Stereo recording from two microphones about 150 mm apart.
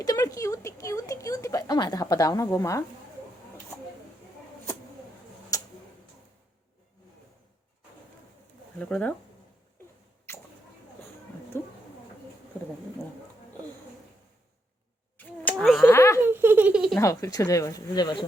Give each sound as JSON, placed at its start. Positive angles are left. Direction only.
{"t": 0.0, "sound": "a woman's voice", "side_deg": 25}
{"t": 5.5, "sound": "tick-tock", "side_deg": 20}
{"t": 8.8, "sound": "speech", "side_deg": 10}
{"t": 10.3, "sound": "a sound", "side_deg": 15}
{"t": 11.5, "sound": "speech", "side_deg": 15}
{"t": 12.5, "sound": "a sound", "side_deg": 10}
{"t": 15.2, "sound": "a sound", "side_deg": 10}
{"t": 15.8, "sound": "speech", "side_deg": 15}
{"t": 16.2, "sound": "speech", "side_deg": -15}
{"t": 17.0, "sound": "speech", "side_deg": 20}